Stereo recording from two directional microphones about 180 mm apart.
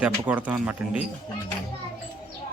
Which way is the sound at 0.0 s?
10° right (ahead or behind).